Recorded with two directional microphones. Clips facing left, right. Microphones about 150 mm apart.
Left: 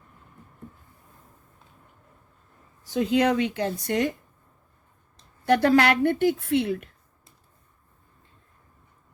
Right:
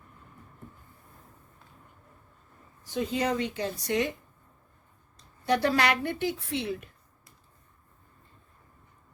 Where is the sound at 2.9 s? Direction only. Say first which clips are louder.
Left 7 dB; 80° left; by 4.0 s 55° left (ahead or behind).